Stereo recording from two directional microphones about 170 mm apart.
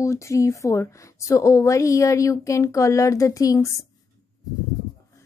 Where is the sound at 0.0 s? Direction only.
15° left (ahead or behind).